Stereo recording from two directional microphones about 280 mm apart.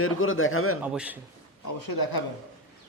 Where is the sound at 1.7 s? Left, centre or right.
Left.